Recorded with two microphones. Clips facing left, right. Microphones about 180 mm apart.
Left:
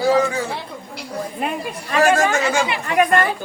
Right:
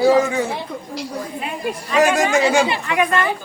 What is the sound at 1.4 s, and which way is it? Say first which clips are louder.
Speech: even; 45° left (ahead or behind).